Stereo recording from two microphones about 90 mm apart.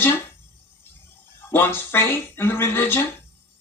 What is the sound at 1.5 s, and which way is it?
Speech, 25° left (ahead or behind).